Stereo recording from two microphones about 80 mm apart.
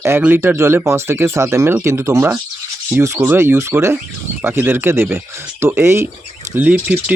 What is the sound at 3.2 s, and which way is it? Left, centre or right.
Speech, right.